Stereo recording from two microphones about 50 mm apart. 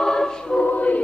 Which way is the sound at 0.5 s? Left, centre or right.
Left.